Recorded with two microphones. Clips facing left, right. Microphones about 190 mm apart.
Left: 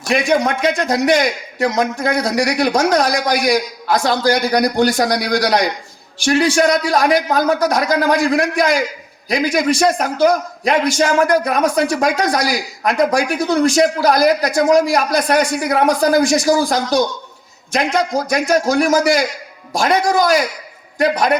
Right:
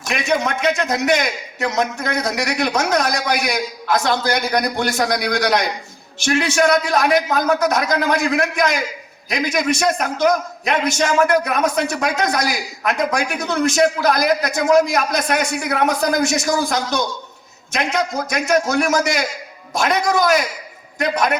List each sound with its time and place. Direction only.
0.1 s a man's voice: 35° left (ahead or behind)